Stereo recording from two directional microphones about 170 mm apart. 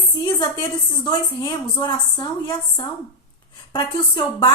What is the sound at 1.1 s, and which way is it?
A woman's voice, 25° left (ahead or behind).